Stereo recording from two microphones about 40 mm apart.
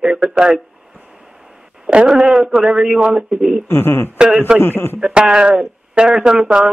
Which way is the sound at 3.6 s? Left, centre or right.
Left.